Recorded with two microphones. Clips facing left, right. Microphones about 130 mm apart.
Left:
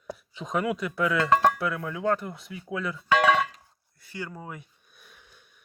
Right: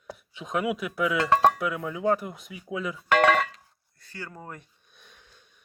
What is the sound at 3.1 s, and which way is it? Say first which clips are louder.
Music: right 1 dB; 55° right (ahead or behind).